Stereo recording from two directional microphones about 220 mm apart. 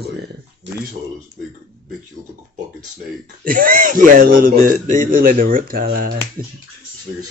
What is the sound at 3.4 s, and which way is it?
Speech, 40° right (ahead or behind).